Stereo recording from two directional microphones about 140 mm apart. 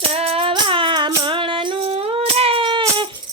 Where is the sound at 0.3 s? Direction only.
40° right (ahead or behind).